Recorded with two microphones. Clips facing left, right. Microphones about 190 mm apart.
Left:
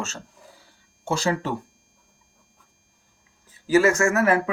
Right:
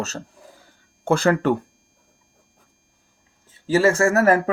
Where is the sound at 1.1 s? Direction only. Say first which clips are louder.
Right 7 dB; 55° right (ahead or behind).